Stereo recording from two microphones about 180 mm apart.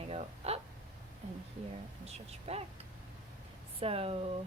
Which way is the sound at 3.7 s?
35° right (ahead or behind).